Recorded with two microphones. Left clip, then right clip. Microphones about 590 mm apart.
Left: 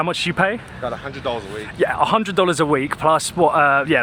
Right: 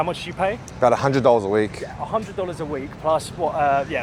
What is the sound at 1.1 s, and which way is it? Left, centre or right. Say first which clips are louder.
Speech: right 9 dB; right.